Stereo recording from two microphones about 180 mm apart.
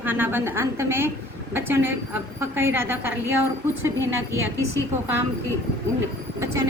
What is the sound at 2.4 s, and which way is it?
Speech, 15° right (ahead or behind).